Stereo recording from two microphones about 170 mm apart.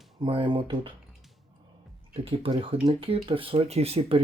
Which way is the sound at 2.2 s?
30° right (ahead or behind).